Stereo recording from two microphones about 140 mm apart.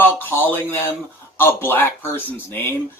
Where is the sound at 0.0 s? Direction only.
15° left (ahead or behind).